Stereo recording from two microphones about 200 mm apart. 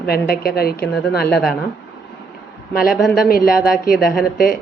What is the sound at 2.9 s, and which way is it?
Speech, centre (ahead or behind).